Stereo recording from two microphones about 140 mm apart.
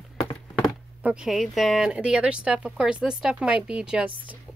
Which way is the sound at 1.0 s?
5° right (ahead or behind).